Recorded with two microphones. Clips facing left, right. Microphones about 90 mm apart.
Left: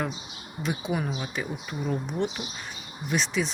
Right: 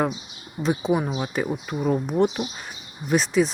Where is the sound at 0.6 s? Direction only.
35° right (ahead or behind).